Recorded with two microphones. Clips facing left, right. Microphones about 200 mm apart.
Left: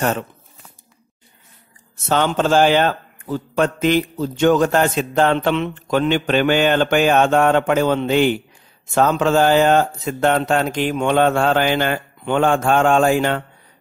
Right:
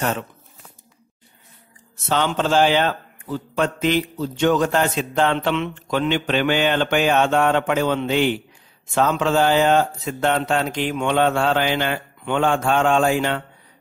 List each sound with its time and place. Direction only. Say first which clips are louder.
2.0 s a man's voice: left 3 dB; 45° left (ahead or behind)